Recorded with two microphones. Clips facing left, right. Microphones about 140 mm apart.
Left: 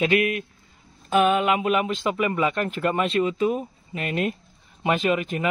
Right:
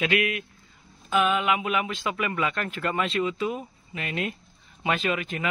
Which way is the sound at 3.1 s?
40° left (ahead or behind).